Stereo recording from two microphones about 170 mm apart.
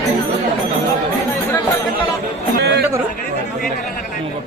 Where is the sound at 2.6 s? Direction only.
75° right (ahead or behind).